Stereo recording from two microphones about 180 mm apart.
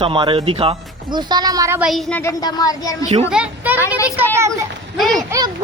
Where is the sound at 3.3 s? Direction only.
5° right (ahead or behind).